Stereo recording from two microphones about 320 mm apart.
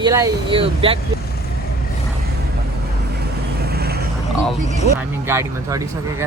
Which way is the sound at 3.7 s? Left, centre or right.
Right.